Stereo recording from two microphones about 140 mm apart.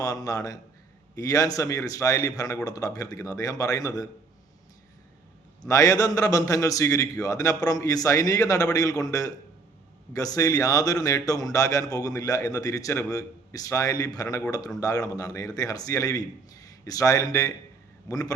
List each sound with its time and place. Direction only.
0.0 s speech: 25° left (ahead or behind)
5.6 s speech: 25° left (ahead or behind)